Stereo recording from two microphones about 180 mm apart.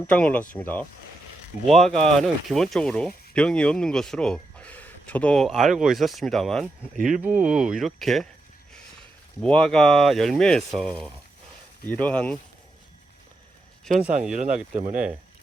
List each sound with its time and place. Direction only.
0.1 s speech: 5° left (ahead or behind)
6.9 s speech: 45° right (ahead or behind)
7.3 s speech: 5° right (ahead or behind)
9.4 s speech: 5° left (ahead or behind)
13.8 s speech: centre (ahead or behind)
14.3 s speech: 40° right (ahead or behind)